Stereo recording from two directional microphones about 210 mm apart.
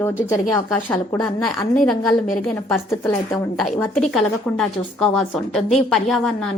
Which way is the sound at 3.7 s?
Centre (ahead or behind).